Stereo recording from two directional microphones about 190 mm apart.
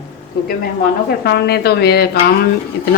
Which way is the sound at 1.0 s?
55° left (ahead or behind).